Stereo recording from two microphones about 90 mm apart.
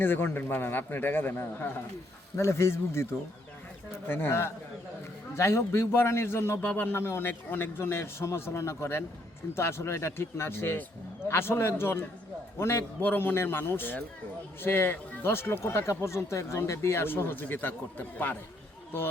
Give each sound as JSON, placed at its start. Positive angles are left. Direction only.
{"t": 0.0, "sound": "speech", "side_deg": 25}